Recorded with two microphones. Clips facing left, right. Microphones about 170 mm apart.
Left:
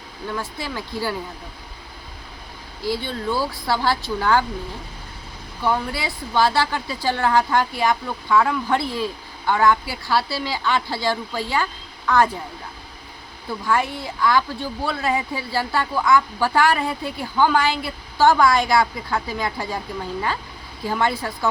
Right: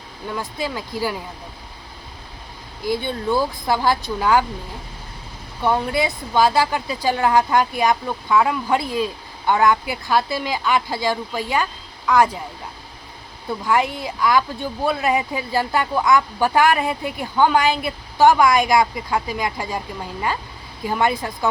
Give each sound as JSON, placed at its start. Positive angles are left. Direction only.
{"t": 0.3, "sound": "speech", "side_deg": -15}
{"t": 2.8, "sound": "speech", "side_deg": -20}
{"t": 5.6, "sound": "speech", "side_deg": -20}
{"t": 13.7, "sound": "speech", "side_deg": -15}
{"t": 20.8, "sound": "speech", "side_deg": -15}